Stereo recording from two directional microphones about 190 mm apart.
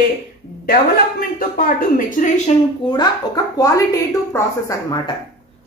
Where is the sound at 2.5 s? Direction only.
35° left (ahead or behind).